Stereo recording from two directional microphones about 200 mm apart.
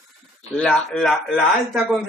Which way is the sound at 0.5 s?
5° left (ahead or behind).